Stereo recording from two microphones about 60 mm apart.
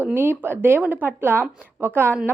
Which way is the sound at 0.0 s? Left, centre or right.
Right.